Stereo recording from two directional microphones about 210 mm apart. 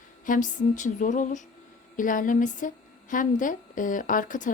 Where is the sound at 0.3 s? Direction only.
35° left (ahead or behind).